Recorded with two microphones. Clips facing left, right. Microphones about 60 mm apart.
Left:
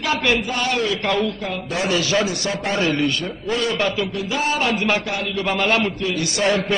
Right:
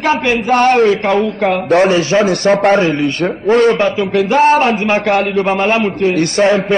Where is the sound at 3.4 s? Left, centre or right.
Right.